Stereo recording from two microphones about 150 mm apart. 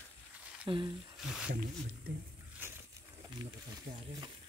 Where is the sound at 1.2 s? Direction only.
5° right (ahead or behind).